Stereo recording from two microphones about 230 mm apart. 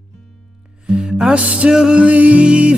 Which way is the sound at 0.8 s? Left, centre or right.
Centre.